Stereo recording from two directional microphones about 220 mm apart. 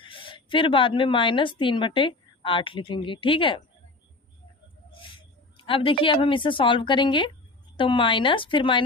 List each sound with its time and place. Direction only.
0.0 s speech: 25° left (ahead or behind)
5.6 s speech: 25° left (ahead or behind)